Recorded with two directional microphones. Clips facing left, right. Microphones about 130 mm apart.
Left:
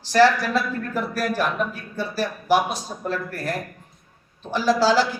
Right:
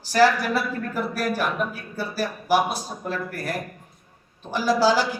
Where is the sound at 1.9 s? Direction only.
10° right (ahead or behind).